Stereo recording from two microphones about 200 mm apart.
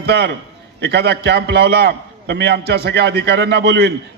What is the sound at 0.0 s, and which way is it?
A man's voice, 60° right (ahead or behind).